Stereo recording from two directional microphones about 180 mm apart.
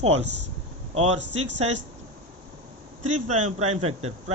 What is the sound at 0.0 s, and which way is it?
A man's voice, 35° right (ahead or behind).